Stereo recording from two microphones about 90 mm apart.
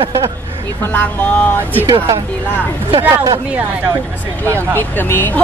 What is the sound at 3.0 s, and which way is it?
Speech, 35° right (ahead or behind).